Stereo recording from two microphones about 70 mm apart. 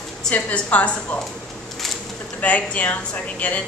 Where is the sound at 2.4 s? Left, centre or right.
Centre.